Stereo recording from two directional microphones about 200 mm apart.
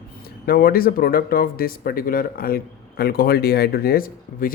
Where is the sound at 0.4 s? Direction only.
50° left (ahead or behind).